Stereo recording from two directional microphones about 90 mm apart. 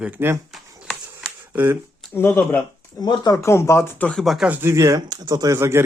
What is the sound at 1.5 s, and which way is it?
Speech, 20° right (ahead or behind).